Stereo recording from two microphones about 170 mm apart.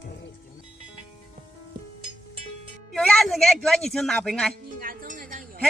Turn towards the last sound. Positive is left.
turn(degrees=-50)  # may be behind; listen again after turning